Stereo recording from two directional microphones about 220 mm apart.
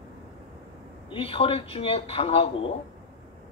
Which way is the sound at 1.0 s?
25° left (ahead or behind).